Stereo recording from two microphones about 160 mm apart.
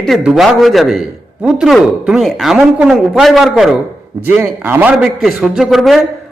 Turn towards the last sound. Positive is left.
turn(degrees=0)  # may be behind; listen again after turning